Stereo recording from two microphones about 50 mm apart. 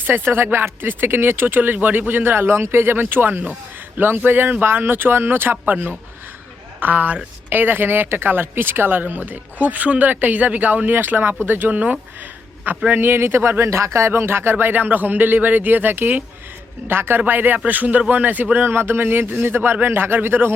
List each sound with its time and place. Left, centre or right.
0.0 s speech: right
6.7 s speech: right
12.9 s speech: right
14.6 s speech: right